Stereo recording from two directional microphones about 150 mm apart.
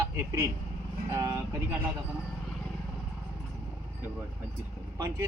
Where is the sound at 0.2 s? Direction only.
20° right (ahead or behind).